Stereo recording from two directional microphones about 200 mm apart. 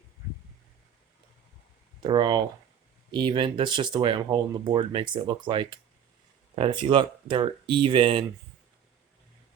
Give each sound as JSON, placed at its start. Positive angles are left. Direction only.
{"t": 2.0, "sound": "speech", "side_deg": -25}